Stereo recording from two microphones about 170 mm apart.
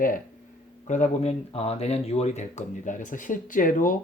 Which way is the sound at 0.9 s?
45° left (ahead or behind).